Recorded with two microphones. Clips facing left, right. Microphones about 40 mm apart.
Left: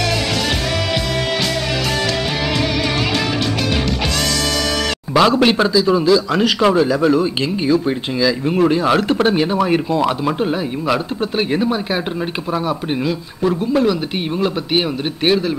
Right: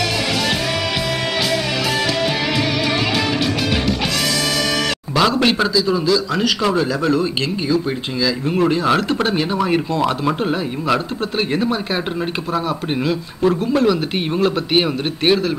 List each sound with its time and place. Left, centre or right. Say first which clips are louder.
5.4 s speech: left 3 dB; centre
5.7 s a man's voice: left 3 dB; left
8.2 s speech: left 2 dB; centre
12.9 s speech: even; centre